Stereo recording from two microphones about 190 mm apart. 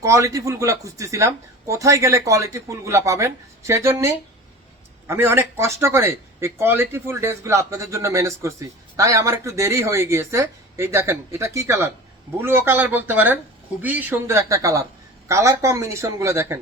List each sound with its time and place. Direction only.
0.0 s a man's voice: 15° right (ahead or behind)